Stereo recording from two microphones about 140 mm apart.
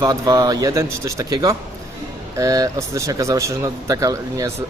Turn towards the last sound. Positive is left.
turn(degrees=-25)  # may be behind; listen again after turning